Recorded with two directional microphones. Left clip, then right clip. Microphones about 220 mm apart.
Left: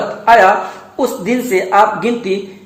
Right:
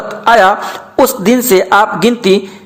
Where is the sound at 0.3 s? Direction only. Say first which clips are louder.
Right 1 dB; 30° right (ahead or behind).